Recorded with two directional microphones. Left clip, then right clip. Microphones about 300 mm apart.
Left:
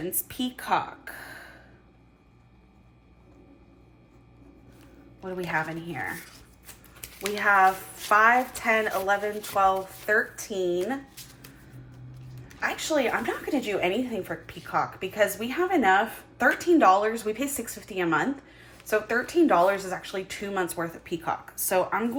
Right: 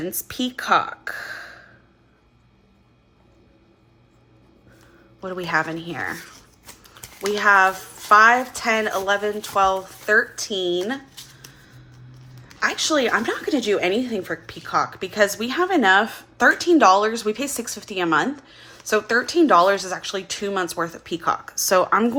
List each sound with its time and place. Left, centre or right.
0.3 s speech: centre
5.5 s speech: centre
7.2 s speech: centre
12.5 s speech: centre